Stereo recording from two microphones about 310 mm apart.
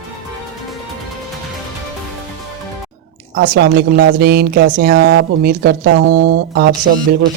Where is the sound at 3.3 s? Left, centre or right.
Right.